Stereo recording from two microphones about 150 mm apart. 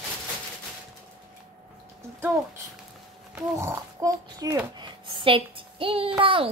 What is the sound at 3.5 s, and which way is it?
A child's voice, 20° right (ahead or behind).